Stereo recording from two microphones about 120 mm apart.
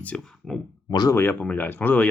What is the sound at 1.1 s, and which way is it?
Speech, 15° left (ahead or behind).